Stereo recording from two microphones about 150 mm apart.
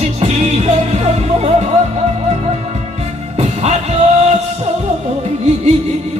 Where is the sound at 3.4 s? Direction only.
45° right (ahead or behind).